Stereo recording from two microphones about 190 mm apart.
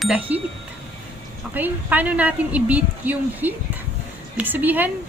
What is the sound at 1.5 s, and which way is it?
A woman's voice, 10° right (ahead or behind).